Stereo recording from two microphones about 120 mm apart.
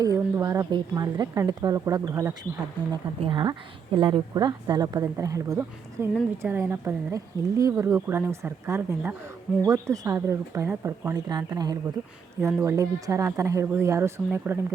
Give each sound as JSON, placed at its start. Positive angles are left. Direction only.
{"t": 0.0, "sound": "a sound", "side_deg": -30}
{"t": 0.7, "sound": "a woman's voice", "side_deg": -35}
{"t": 3.2, "sound": "a woman's voice", "side_deg": -40}
{"t": 11.1, "sound": "a woman's voice", "side_deg": -35}